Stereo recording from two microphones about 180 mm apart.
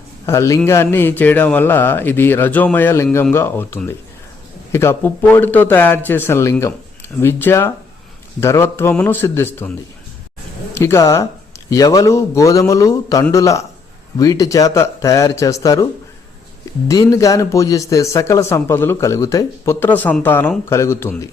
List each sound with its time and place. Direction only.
0.3 s speech: 15° left (ahead or behind)
10.8 s speech: 15° left (ahead or behind)
16.9 s speech: 20° left (ahead or behind)